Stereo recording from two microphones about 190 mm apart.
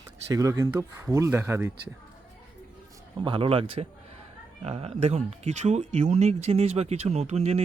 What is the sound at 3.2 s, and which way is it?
Speech, 30° right (ahead or behind).